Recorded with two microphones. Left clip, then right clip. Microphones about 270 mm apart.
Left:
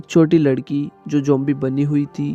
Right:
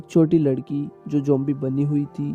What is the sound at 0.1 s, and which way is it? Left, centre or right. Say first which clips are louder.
Speech: left 4 dB; left.